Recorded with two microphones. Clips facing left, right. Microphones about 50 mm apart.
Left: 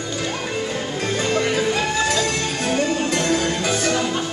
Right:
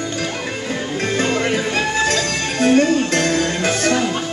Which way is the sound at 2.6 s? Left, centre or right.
Right.